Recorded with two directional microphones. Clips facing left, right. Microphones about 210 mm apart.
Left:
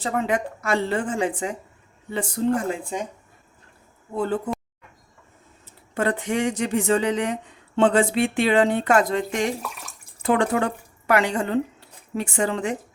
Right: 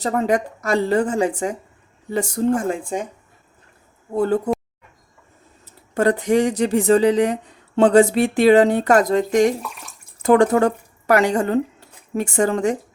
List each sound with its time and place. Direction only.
0.0 s speech: 40° right (ahead or behind)
4.1 s speech: 40° right (ahead or behind)
5.9 s speech: 40° right (ahead or behind)